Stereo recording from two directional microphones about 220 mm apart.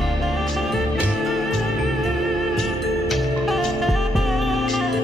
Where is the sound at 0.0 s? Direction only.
Centre (ahead or behind).